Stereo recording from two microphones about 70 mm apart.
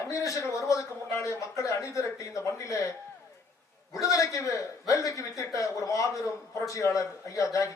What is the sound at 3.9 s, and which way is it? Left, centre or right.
A woman's voice, left.